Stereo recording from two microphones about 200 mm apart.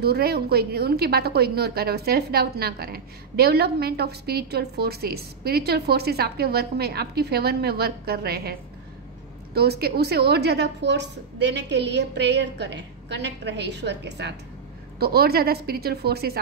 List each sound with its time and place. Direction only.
0.0 s a woman's voice: 50° right (ahead or behind)